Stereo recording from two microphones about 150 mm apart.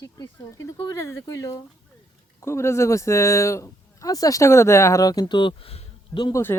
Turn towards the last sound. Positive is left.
turn(degrees=30)  # may be behind; listen again after turning